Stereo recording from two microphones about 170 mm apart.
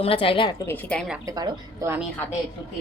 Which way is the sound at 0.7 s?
10° left (ahead or behind).